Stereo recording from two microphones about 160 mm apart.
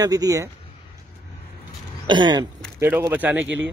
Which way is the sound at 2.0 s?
25° right (ahead or behind).